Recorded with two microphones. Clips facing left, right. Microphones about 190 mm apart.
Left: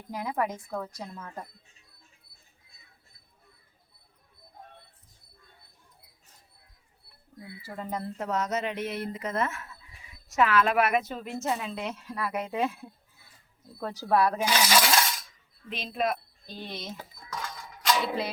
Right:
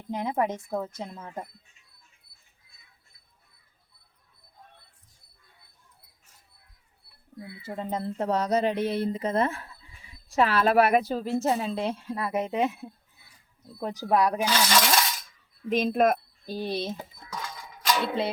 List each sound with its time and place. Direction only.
0.1 s speech: 25° right (ahead or behind)
7.3 s speech: 25° right (ahead or behind)
14.4 s a sound: 10° left (ahead or behind)
15.7 s speech: 50° right (ahead or behind); by 17.1 s 30° right (ahead or behind)
17.3 s music: centre (ahead or behind)